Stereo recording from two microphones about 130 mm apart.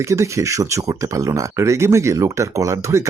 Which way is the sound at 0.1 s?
25° right (ahead or behind).